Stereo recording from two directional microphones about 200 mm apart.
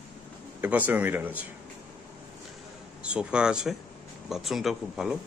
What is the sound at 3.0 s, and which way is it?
Speech, 5° right (ahead or behind).